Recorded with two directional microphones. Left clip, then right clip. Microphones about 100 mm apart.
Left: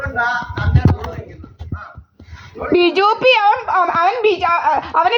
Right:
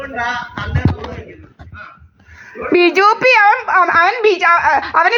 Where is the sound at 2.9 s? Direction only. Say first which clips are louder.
Right 3 dB; 25° right (ahead or behind).